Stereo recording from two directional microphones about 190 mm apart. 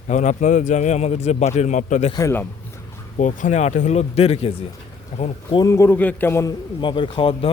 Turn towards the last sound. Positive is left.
turn(degrees=25)  # may be behind; listen again after turning